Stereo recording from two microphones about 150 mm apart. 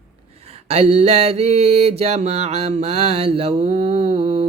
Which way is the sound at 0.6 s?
45° right (ahead or behind).